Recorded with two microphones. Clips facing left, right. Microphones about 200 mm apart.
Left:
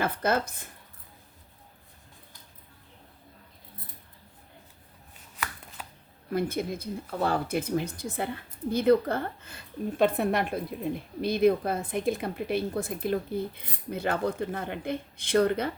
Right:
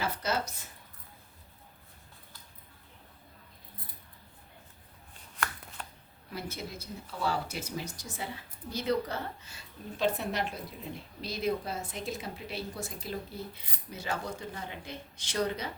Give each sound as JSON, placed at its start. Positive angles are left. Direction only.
{"t": 0.0, "sound": "speech", "side_deg": 55}
{"t": 5.8, "sound": "a sound", "side_deg": 5}
{"t": 6.3, "sound": "speech", "side_deg": 55}